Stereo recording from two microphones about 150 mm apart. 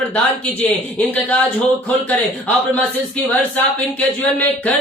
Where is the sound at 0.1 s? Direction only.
10° left (ahead or behind).